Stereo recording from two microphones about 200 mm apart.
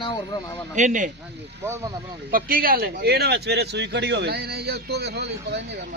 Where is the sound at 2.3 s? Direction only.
45° right (ahead or behind).